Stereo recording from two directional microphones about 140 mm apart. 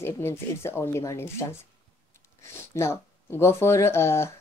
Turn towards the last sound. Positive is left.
turn(degrees=20)  # may be behind; listen again after turning